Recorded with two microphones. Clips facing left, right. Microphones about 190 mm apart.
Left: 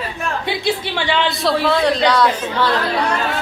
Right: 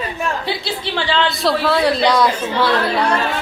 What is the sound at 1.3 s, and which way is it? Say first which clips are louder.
A woman's voice: even; centre (ahead or behind).